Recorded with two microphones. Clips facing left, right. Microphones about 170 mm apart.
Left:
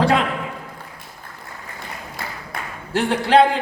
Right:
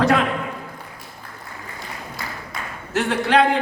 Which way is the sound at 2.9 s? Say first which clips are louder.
Left 2 dB; 30° left (ahead or behind).